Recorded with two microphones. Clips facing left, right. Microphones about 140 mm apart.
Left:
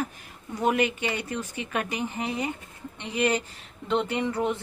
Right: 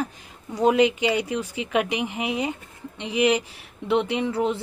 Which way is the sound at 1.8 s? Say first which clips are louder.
Right 6 dB; 90° right.